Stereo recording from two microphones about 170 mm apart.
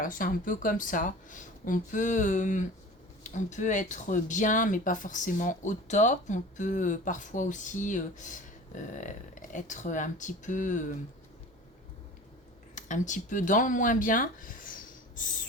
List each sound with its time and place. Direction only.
0.0 s speech: 55° left (ahead or behind)
12.7 s speech: 45° left (ahead or behind)